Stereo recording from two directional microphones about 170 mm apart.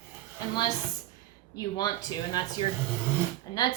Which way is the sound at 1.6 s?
20° left (ahead or behind).